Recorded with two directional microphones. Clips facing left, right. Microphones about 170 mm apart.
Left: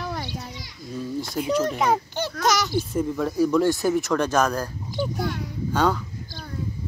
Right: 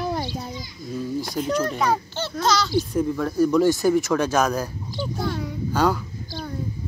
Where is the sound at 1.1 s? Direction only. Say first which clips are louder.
Left 1 dB; 5° left (ahead or behind).